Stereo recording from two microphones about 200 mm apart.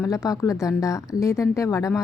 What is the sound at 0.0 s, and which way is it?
A woman's voice, 15° left (ahead or behind).